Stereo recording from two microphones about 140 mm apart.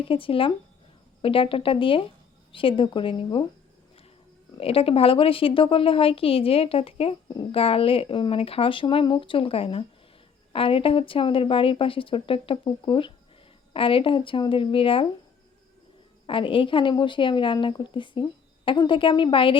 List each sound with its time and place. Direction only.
0.0 s speech: 40° left (ahead or behind)
4.5 s a woman's voice: 45° left (ahead or behind)
16.2 s speech: 40° left (ahead or behind)